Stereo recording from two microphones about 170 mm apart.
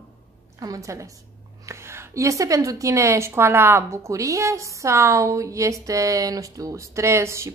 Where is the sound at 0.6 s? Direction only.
20° right (ahead or behind).